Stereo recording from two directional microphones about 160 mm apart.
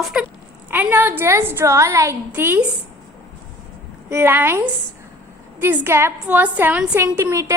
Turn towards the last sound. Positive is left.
turn(degrees=-15)  # may be behind; listen again after turning